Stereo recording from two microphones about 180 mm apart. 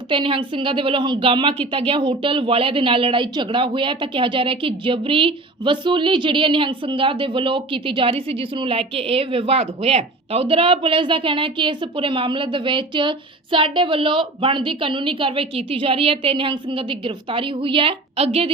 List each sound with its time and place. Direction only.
0.1 s a woman's voice: 30° right (ahead or behind)